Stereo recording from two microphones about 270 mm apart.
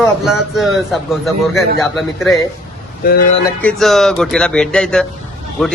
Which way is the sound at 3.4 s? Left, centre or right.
Centre.